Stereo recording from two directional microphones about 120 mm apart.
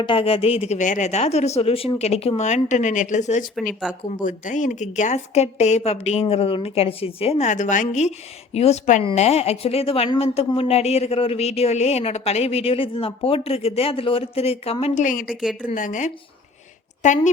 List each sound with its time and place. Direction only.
0.0 s speech: 45° left (ahead or behind)
0.8 s speech: 90° left; by 7.4 s 55° left (ahead or behind)
7.4 s a woman's voice: 90° left
8.5 s speech: 60° left (ahead or behind)
15.7 s a woman's voice: 90° left